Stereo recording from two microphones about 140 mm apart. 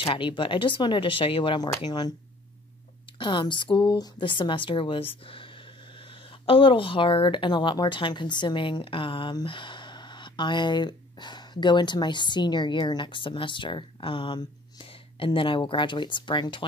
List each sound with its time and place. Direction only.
0.0 s speech: 35° left (ahead or behind)
3.2 s speech: 35° left (ahead or behind)